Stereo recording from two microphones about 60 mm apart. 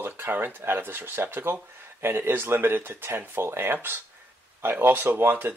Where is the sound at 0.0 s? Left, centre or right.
Right.